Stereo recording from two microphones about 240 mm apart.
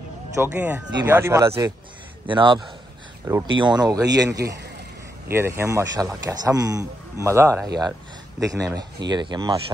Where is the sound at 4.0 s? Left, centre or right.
Right.